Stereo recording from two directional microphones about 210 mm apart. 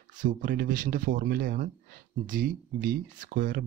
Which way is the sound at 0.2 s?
40° right (ahead or behind).